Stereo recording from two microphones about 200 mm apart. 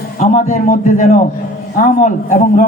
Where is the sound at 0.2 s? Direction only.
35° left (ahead or behind).